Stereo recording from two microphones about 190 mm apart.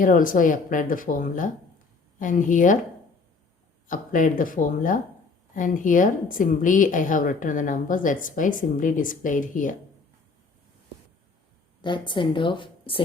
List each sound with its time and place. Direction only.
0.0 s a woman's voice: 45° left (ahead or behind)
3.8 s a woman's voice: 45° left (ahead or behind)
11.8 s a woman's voice: 25° left (ahead or behind)